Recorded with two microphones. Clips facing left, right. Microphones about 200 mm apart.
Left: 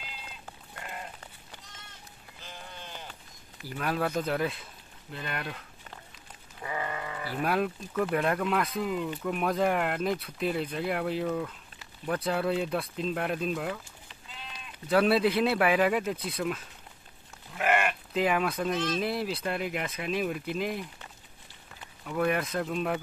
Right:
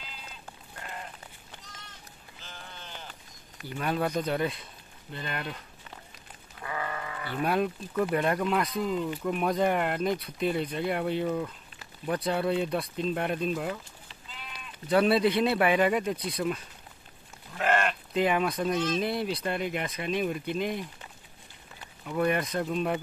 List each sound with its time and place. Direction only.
3.6 s speech: centre (ahead or behind)
6.6 s sheep: 20° left (ahead or behind)
7.2 s speech: centre (ahead or behind)
14.9 s speech: centre (ahead or behind)
22.0 s speech: centre (ahead or behind)